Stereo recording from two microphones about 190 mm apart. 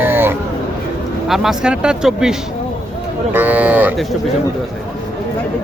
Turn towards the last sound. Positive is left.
turn(degrees=-5)  # may be behind; listen again after turning